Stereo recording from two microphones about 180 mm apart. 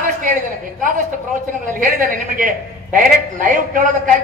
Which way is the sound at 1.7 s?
50° right (ahead or behind).